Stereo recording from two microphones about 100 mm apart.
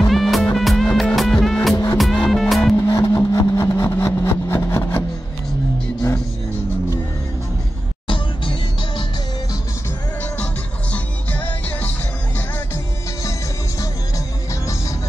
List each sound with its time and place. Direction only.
0.0 s music: centre (ahead or behind)
2.7 s vehicle: 30° left (ahead or behind)
8.1 s music: 60° left (ahead or behind)
10.3 s music: 15° left (ahead or behind)
12.4 s music: 25° left (ahead or behind)